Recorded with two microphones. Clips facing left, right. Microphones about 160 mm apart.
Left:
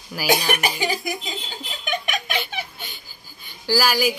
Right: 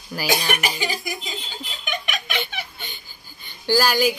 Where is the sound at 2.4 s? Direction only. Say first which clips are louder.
Even; 5° left (ahead or behind).